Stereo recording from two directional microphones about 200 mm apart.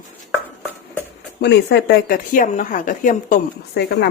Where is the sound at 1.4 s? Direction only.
60° left (ahead or behind).